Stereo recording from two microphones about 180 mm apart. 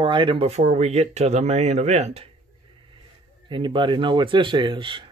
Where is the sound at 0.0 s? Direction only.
25° right (ahead or behind).